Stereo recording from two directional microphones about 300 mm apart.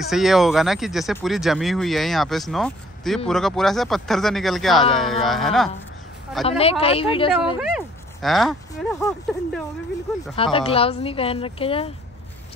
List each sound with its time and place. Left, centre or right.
0.0 s speech: centre
6.4 s speech: centre
7.7 s speech: centre
10.3 s speech: centre